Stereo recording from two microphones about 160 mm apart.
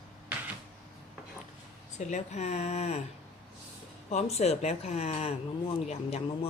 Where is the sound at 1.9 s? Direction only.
45° left (ahead or behind).